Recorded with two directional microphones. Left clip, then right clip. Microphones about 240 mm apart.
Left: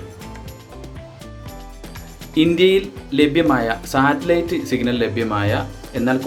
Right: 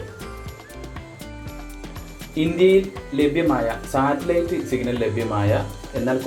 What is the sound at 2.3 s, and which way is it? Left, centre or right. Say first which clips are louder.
Speech: left 2 dB; centre.